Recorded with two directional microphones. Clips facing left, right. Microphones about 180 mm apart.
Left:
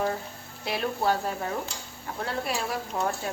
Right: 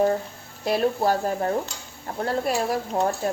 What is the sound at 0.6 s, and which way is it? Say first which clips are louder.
Speech: right 6 dB; 40° right (ahead or behind).